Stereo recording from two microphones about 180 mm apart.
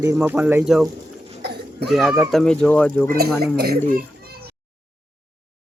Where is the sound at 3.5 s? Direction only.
60° right (ahead or behind).